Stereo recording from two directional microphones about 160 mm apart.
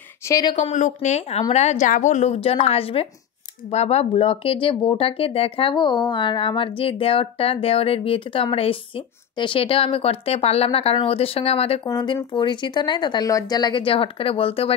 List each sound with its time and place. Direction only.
0.3 s a woman's voice: 25° left (ahead or behind)
0.6 s a woman's voice: 45° left (ahead or behind)
11.8 s a woman's voice: 25° left (ahead or behind)